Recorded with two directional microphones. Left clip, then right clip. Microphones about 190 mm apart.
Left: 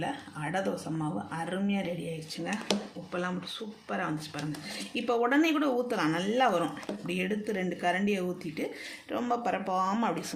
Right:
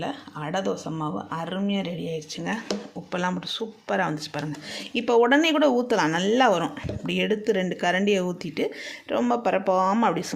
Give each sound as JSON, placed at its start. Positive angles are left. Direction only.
{"t": 1.5, "sound": "speech", "side_deg": -45}
{"t": 3.1, "sound": "speech", "side_deg": -60}